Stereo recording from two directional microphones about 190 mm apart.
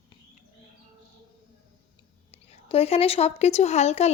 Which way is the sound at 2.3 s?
30° left (ahead or behind).